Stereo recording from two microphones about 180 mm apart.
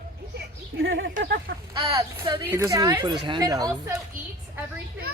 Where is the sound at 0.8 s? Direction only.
90° right.